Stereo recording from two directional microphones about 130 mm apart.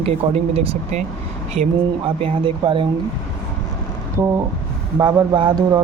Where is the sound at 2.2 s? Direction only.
40° right (ahead or behind).